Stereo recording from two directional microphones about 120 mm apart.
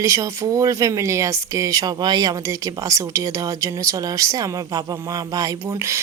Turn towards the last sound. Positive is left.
turn(degrees=-25)  # may be behind; listen again after turning